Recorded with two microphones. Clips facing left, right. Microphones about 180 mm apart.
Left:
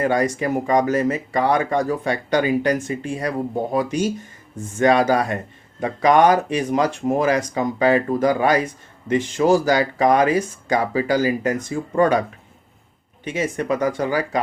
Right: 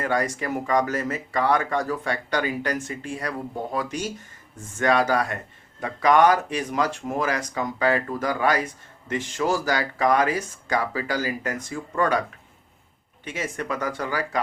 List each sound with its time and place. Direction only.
0.0 s speech: 20° left (ahead or behind)
13.2 s speech: 20° left (ahead or behind)